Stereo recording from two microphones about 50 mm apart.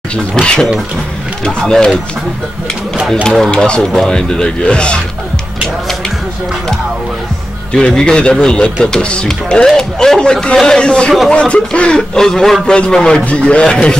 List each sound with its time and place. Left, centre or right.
0.4 s speech: centre
3.3 s speech: centre
7.7 s speech: centre
12.0 s speech: centre